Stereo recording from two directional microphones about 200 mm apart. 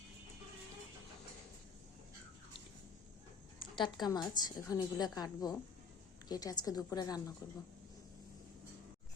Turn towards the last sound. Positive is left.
turn(degrees=20)  # may be behind; listen again after turning